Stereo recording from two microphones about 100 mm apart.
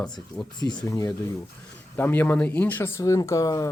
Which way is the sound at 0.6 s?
40° left (ahead or behind).